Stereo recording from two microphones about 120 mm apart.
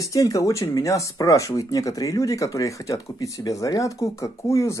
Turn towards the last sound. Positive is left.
turn(degrees=25)  # may be behind; listen again after turning